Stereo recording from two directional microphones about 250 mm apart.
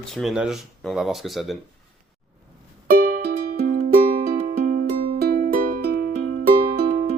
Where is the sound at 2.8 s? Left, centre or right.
Right.